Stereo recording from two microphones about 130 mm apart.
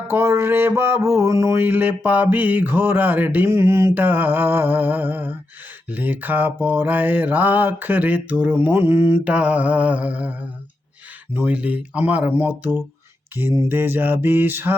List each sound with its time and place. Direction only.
0.1 s mantra: 20° right (ahead or behind)
11.3 s mantra: 10° right (ahead or behind)